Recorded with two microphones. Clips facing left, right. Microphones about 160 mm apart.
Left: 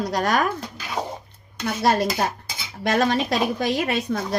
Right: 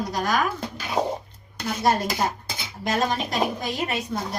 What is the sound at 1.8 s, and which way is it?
A woman's voice, 75° left (ahead or behind).